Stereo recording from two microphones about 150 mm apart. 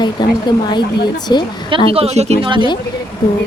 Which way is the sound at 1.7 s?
40° right (ahead or behind).